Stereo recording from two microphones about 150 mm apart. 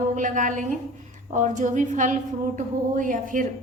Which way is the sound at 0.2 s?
60° right (ahead or behind).